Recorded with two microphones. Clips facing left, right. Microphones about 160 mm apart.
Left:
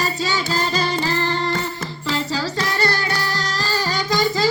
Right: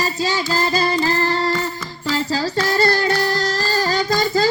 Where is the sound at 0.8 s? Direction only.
40° right (ahead or behind).